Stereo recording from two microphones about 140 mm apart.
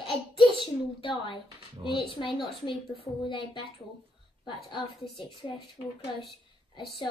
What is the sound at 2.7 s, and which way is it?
Speech, 35° left (ahead or behind).